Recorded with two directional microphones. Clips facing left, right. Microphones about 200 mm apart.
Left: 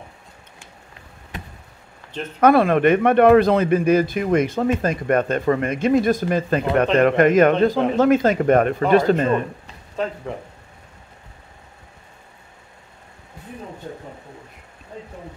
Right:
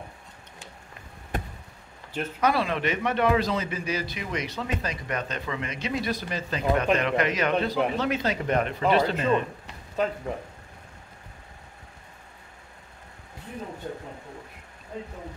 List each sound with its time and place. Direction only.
1.3 s chop: 50° right (ahead or behind)
2.4 s a man's voice: 55° left (ahead or behind)